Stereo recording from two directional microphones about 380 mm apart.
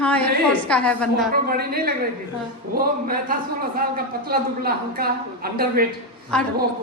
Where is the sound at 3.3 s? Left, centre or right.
Right.